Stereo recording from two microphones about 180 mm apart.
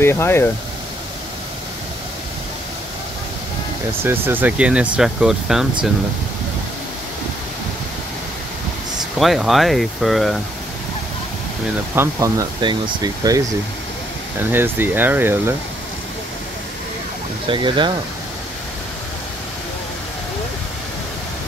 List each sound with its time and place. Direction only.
0.0 s speech: 15° left (ahead or behind)
4.0 s speech: 10° right (ahead or behind)
9.2 s speech: centre (ahead or behind)
11.9 s speech: 15° right (ahead or behind)
14.5 s speech: 10° right (ahead or behind)
17.5 s speech: 25° right (ahead or behind)